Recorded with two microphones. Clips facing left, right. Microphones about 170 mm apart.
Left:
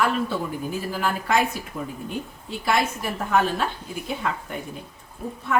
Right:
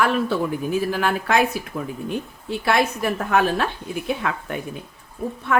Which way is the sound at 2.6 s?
70° right (ahead or behind).